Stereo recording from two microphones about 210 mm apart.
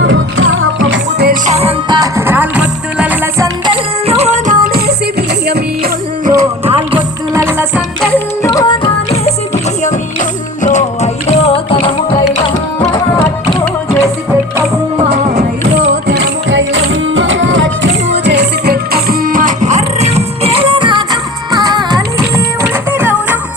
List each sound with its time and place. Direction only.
0.0 s music: 65° right (ahead or behind)
1.3 s music: 30° right (ahead or behind); by 3.5 s 10° right (ahead or behind)
3.7 s music: 30° right (ahead or behind); by 6.3 s 50° right (ahead or behind)
6.4 s music: 30° right (ahead or behind)
6.9 s music: 10° right (ahead or behind)
8.4 s music: 20° left (ahead or behind)
9.8 s music: 35° left (ahead or behind)
16.0 s music: 55° right (ahead or behind); by 23.4 s 10° right (ahead or behind)